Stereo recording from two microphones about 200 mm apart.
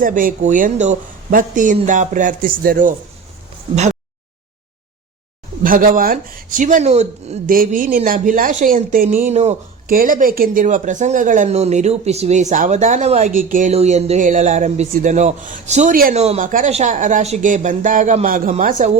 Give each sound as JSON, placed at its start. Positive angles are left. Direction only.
{"t": 0.0, "sound": "speech", "side_deg": -45}
{"t": 5.6, "sound": "speech", "side_deg": -45}